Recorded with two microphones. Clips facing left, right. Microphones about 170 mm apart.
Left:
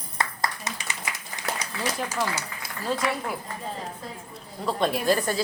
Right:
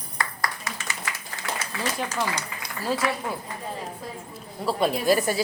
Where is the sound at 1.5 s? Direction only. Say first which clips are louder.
Left 1 dB; 40° left (ahead or behind).